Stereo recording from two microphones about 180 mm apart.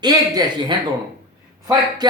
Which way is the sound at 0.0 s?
25° right (ahead or behind).